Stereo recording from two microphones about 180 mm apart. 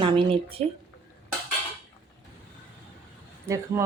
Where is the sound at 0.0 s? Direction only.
30° right (ahead or behind).